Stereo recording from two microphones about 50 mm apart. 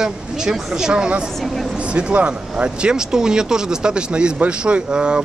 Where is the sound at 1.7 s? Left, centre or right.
Right.